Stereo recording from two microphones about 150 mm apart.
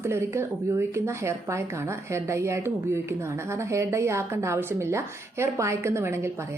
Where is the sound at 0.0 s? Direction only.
15° right (ahead or behind).